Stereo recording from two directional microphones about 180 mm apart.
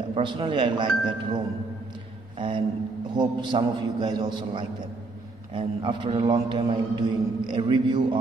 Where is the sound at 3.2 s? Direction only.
25° right (ahead or behind).